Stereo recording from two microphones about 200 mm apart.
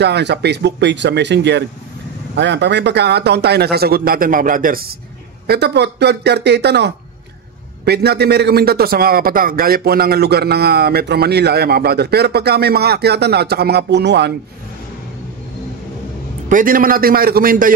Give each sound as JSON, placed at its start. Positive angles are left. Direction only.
{"t": 0.0, "sound": "a man's voice", "side_deg": -60}
{"t": 5.5, "sound": "a man's voice", "side_deg": -55}
{"t": 16.4, "sound": "a man's voice", "side_deg": -45}